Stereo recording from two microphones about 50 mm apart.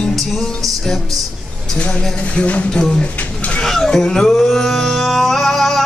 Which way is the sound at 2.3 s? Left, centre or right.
Left.